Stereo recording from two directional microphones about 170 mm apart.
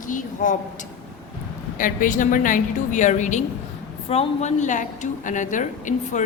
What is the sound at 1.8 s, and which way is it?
A woman's voice, 50° left (ahead or behind).